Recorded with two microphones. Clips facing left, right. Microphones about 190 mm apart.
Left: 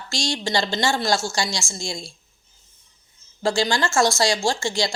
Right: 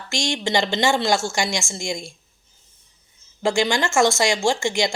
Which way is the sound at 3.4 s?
20° right (ahead or behind).